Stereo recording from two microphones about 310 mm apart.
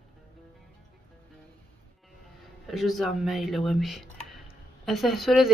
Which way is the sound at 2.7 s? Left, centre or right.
Centre.